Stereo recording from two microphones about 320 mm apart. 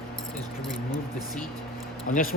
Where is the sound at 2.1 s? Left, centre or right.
Left.